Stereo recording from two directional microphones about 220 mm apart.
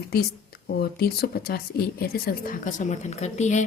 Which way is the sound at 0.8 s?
45° left (ahead or behind).